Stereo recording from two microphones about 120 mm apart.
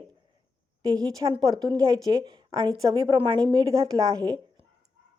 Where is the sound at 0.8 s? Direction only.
30° right (ahead or behind).